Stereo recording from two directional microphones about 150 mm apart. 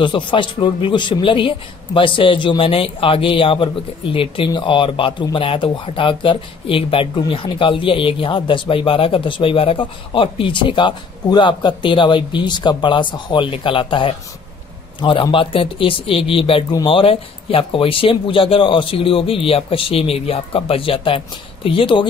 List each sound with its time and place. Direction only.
0.0 s a man's voice: 30° left (ahead or behind)